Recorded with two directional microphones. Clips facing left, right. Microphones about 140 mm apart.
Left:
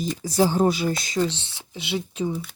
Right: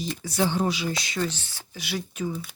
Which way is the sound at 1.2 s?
25° left (ahead or behind).